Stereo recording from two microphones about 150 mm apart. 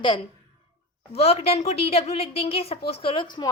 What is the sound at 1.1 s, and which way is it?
A woman's voice, 40° left (ahead or behind).